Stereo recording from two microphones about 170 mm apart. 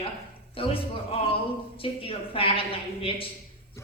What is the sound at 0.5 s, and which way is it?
A man's voice, 35° left (ahead or behind).